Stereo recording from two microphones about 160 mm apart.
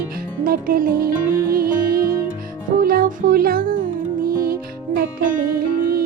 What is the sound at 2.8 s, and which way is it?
Music, 65° right (ahead or behind).